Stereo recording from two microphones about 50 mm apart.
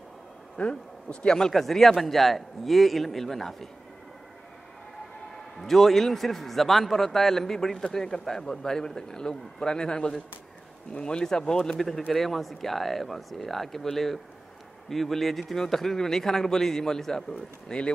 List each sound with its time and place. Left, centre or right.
0.6 s a man's voice: centre
1.5 s a man's voice: centre
5.3 s a man's voice: centre